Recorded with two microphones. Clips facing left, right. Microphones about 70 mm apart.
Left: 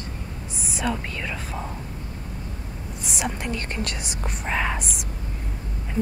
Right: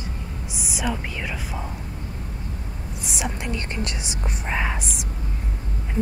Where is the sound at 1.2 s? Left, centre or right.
Centre.